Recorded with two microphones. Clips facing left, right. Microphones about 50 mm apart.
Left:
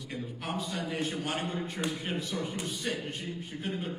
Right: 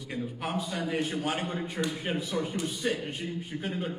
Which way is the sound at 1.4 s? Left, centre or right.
Centre.